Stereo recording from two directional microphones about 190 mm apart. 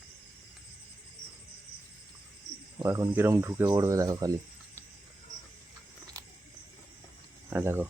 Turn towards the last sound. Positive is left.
turn(degrees=-10)  # may be behind; listen again after turning